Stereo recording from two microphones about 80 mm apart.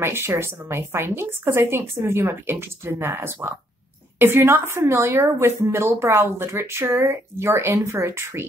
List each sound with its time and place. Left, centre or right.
0.0 s a woman's voice: right